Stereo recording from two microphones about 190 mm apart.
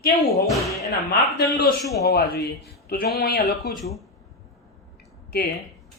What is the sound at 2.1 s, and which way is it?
Speech, 55° left (ahead or behind).